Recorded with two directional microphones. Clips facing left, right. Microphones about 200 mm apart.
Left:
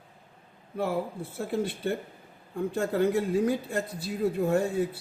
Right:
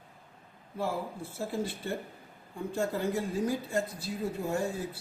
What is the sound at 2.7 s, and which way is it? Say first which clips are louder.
Speech: left 5 dB; 60° left (ahead or behind).